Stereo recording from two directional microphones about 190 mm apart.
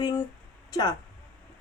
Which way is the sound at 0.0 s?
20° left (ahead or behind).